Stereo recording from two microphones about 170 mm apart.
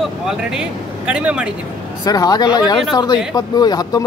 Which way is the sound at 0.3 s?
5° right (ahead or behind).